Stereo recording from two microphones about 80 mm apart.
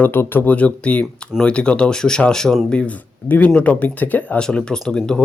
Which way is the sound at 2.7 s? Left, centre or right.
Centre.